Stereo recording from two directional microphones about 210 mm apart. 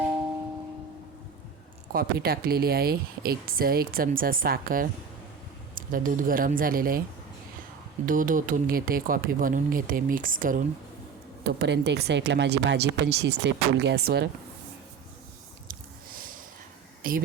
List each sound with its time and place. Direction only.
1.9 s speech: 45° right (ahead or behind)
8.0 s speech: 40° right (ahead or behind)
11.4 s speech: 55° right (ahead or behind)
15.6 s a sound: 40° right (ahead or behind)
17.0 s speech: 40° right (ahead or behind)